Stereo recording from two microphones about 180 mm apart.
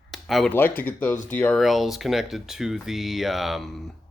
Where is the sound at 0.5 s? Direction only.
10° left (ahead or behind).